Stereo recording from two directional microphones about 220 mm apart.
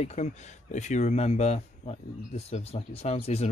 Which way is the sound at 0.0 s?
30° left (ahead or behind).